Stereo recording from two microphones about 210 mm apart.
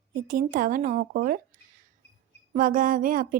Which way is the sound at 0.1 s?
40° right (ahead or behind).